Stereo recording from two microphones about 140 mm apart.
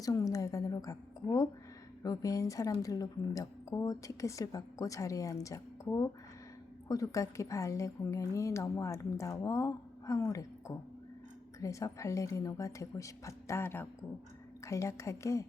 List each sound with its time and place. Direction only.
0.0 s a woman's voice: 25° left (ahead or behind)